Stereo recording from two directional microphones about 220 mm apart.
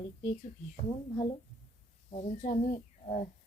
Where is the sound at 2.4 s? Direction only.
40° left (ahead or behind).